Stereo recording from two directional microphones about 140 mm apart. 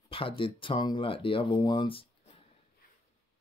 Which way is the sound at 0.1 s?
40° left (ahead or behind).